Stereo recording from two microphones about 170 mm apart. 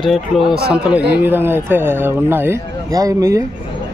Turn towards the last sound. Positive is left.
turn(degrees=-20)  # may be behind; listen again after turning